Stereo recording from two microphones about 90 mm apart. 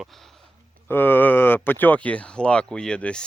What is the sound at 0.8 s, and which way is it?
Speech, 20° left (ahead or behind).